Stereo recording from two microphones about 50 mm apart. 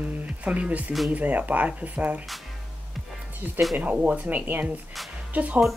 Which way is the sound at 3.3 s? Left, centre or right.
Right.